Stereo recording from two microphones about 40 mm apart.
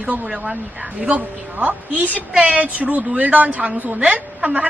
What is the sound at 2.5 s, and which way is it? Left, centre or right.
A woman's voice, right.